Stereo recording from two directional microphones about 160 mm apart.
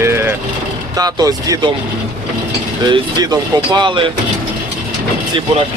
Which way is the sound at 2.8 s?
25° right (ahead or behind).